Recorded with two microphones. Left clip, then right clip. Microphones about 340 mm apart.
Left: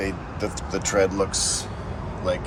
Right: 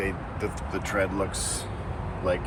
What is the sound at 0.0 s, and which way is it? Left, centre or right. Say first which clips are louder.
Speech: left 2 dB; centre.